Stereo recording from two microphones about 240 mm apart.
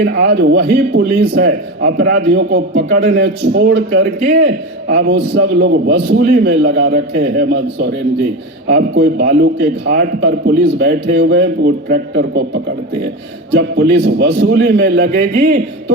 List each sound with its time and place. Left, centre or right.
0.0 s a man's voice: right
13.5 s a man's voice: right